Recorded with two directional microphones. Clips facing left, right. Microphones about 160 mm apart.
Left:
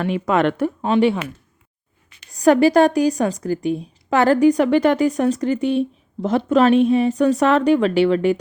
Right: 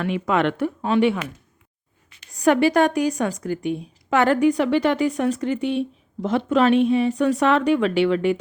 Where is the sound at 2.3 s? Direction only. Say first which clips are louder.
Left 4 dB; 35° left (ahead or behind).